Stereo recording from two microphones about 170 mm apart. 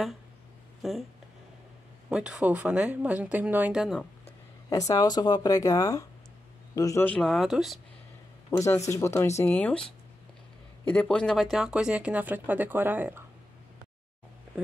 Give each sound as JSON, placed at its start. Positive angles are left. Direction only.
{"t": 0.8, "sound": "speech", "side_deg": 0}
{"t": 2.0, "sound": "speech", "side_deg": -5}
{"t": 4.6, "sound": "speech", "side_deg": 20}
{"t": 7.2, "sound": "speech", "side_deg": 0}
{"t": 8.5, "sound": "speech", "side_deg": 15}
{"t": 10.9, "sound": "speech", "side_deg": 5}